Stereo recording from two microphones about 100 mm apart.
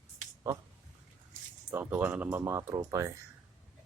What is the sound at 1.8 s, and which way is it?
Speech, 20° right (ahead or behind).